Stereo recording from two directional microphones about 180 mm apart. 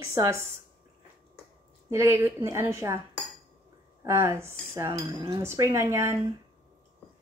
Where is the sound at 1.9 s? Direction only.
15° right (ahead or behind).